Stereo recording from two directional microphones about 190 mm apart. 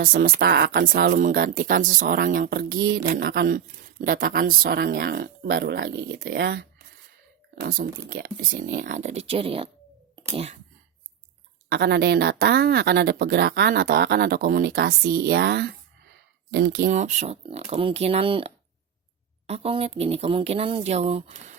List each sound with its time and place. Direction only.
0.0 s speech: 50° right (ahead or behind); by 10.6 s 35° right (ahead or behind)
11.7 s speech: 60° right (ahead or behind)
16.8 s speech: 40° right (ahead or behind)